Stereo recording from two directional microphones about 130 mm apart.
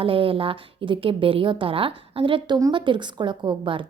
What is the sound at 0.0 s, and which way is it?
A woman's voice, 45° right (ahead or behind).